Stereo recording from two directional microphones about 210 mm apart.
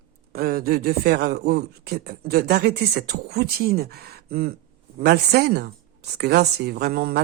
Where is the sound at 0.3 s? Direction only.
45° right (ahead or behind).